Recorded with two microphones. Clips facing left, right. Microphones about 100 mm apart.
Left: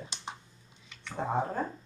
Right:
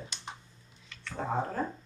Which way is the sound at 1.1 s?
15° left (ahead or behind).